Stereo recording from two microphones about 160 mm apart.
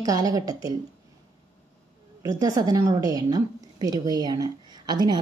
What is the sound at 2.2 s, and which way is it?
A woman's voice, 20° right (ahead or behind).